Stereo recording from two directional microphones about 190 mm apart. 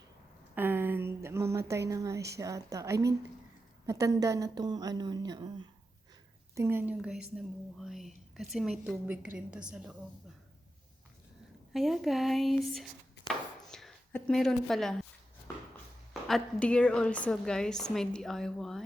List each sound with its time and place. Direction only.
0.5 s a sound: 10° right (ahead or behind)
1.9 s a woman's voice: 15° right (ahead or behind)
11.7 s speech: centre (ahead or behind)
16.2 s speech: 5° left (ahead or behind)